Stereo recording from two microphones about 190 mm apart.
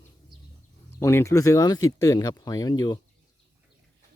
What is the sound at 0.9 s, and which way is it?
Speech, 15° left (ahead or behind).